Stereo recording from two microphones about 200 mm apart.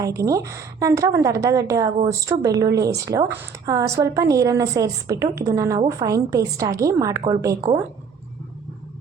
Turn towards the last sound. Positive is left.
turn(degrees=-20)  # may be behind; listen again after turning